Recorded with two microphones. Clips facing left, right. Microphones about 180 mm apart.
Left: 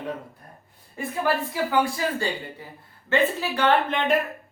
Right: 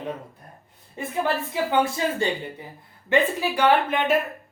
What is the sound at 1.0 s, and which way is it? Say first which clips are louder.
Speech: even; 20° right (ahead or behind).